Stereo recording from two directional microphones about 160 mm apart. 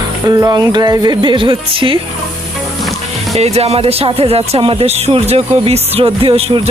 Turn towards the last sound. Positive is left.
turn(degrees=-35)  # may be behind; listen again after turning